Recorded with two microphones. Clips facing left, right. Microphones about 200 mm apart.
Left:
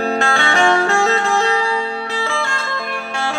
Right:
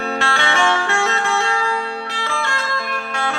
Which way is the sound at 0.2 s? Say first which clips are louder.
Left 3 dB; 35° left (ahead or behind).